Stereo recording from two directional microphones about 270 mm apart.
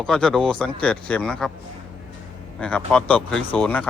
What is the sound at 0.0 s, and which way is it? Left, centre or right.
Speech, centre.